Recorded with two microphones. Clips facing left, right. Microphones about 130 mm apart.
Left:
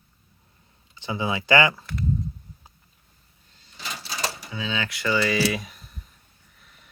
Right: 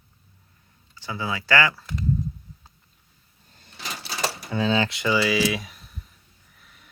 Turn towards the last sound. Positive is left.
turn(degrees=0)  # may be behind; listen again after turning